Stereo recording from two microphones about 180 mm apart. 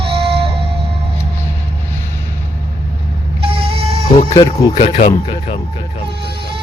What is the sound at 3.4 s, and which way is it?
Vehicle, 30° right (ahead or behind).